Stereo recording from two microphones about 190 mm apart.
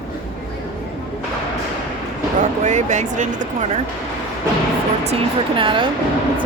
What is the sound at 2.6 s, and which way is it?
Speech, 40° right (ahead or behind).